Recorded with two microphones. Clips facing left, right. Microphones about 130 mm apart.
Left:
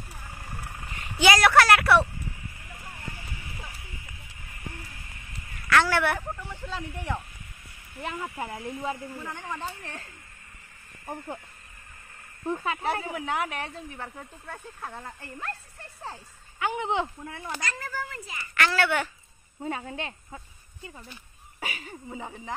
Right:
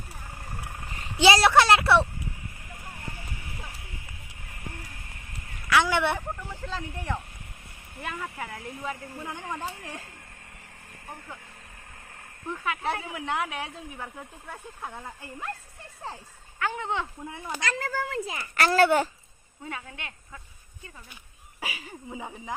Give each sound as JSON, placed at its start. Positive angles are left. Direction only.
{"t": 0.8, "sound": "vehicle", "side_deg": -35}
{"t": 1.2, "sound": "a woman's voice", "side_deg": -25}
{"t": 5.7, "sound": "speech", "side_deg": -15}
{"t": 6.5, "sound": "speech", "side_deg": 10}
{"t": 8.0, "sound": "speech", "side_deg": 25}
{"t": 9.2, "sound": "speech", "side_deg": -10}
{"t": 12.4, "sound": "speech", "side_deg": 30}
{"t": 12.8, "sound": "speech", "side_deg": 0}
{"t": 16.5, "sound": "speech", "side_deg": 15}
{"t": 17.2, "sound": "speech", "side_deg": -15}
{"t": 17.8, "sound": "a child's voice", "side_deg": -65}
{"t": 18.4, "sound": "a woman's voice", "side_deg": -40}
{"t": 19.6, "sound": "speech", "side_deg": 35}
{"t": 21.5, "sound": "speech", "side_deg": -5}